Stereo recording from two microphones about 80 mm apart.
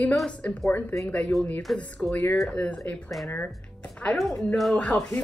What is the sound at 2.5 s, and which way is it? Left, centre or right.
Speech, centre.